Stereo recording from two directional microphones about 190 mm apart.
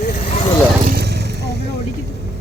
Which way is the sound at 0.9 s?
55° right (ahead or behind).